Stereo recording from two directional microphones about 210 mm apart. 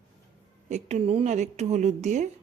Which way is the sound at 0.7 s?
30° right (ahead or behind).